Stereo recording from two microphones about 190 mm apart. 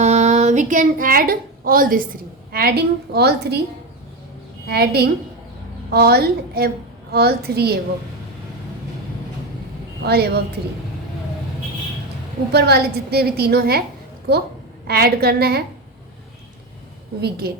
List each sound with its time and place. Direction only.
0.0 s a woman's voice: 35° right (ahead or behind); by 3.6 s 60° right (ahead or behind)
4.7 s a woman's voice: 55° right (ahead or behind)
10.0 s a woman's voice: 55° right (ahead or behind)
12.5 s a woman's voice: 60° right (ahead or behind)
14.8 s a woman's voice: 55° right (ahead or behind)
17.2 s a woman's voice: 55° right (ahead or behind)